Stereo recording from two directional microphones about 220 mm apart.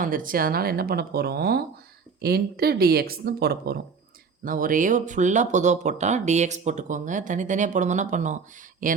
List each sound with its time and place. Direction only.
0.0 s a woman's voice: 40° right (ahead or behind)